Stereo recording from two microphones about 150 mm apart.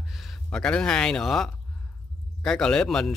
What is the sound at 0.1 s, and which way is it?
Speech, centre (ahead or behind).